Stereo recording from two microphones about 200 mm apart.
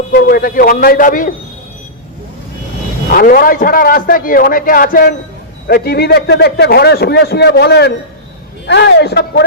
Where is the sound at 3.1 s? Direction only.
45° left (ahead or behind).